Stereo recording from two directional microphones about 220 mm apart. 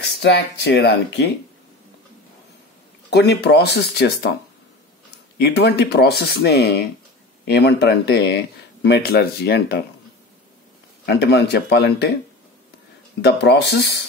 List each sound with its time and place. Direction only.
0.0 s speech: 50° left (ahead or behind)
3.1 s speech: 50° left (ahead or behind)
5.4 s speech: 50° left (ahead or behind)
11.1 s speech: 50° left (ahead or behind)
13.2 s speech: 50° left (ahead or behind)